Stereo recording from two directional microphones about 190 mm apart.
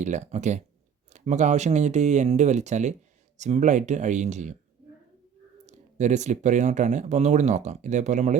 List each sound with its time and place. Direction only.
0.0 s speech: 40° right (ahead or behind)
5.6 s speech: 40° right (ahead or behind)